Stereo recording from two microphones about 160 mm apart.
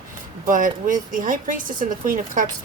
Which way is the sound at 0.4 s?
55° right (ahead or behind).